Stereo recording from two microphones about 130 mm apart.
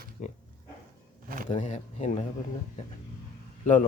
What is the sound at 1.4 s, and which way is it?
Speech, 70° left (ahead or behind).